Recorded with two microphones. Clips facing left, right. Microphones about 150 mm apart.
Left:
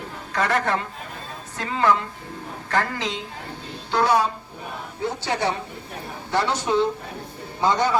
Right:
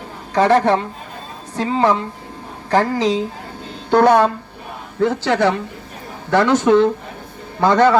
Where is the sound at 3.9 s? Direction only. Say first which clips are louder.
Right 8 dB; 55° right (ahead or behind).